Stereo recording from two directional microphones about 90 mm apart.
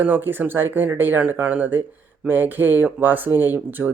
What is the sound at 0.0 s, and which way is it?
Speech, 20° right (ahead or behind).